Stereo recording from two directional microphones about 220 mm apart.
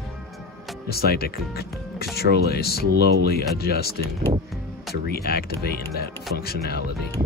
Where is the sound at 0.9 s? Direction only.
45° left (ahead or behind).